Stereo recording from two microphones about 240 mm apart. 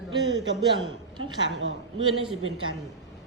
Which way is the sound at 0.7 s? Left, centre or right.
Centre.